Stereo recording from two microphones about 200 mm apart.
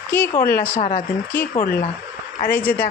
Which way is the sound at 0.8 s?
45° left (ahead or behind).